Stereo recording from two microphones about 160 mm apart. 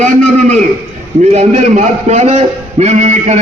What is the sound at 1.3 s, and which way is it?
A man's voice, 45° right (ahead or behind).